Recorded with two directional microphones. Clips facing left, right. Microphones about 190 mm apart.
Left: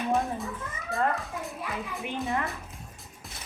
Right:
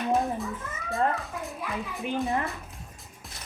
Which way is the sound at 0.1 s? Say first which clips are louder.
Right 3 dB; centre (ahead or behind).